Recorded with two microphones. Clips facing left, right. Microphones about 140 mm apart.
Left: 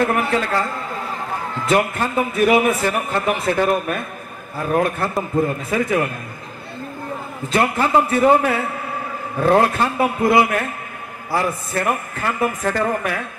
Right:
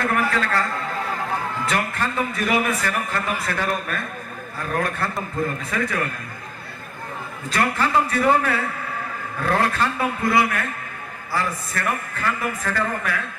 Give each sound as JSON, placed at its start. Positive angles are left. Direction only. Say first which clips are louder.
{"t": 0.0, "sound": "a man's voice", "louder": "left 4 dB", "side_deg": 25}
{"t": 1.7, "sound": "a man's voice", "louder": "left 8 dB", "side_deg": 25}
{"t": 7.5, "sound": "a man's voice", "louder": "left 4 dB", "side_deg": 25}